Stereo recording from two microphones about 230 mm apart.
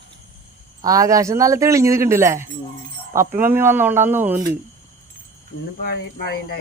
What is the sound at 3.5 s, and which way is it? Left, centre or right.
Speech, centre.